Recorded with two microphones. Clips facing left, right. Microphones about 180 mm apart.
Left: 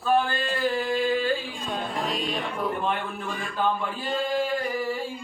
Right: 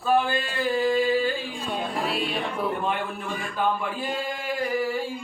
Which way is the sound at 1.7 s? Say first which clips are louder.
Right 1 dB; 5° right (ahead or behind).